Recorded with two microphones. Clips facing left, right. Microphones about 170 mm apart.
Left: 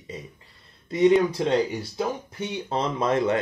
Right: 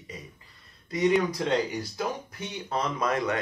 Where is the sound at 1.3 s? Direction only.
30° left (ahead or behind).